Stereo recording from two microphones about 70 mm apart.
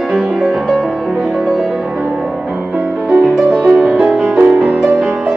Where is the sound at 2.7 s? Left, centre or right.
Centre.